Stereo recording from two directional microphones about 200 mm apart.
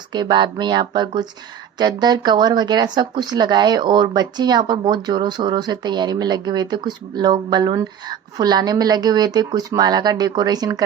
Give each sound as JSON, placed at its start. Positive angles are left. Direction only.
{"t": 0.1, "sound": "speech", "side_deg": -20}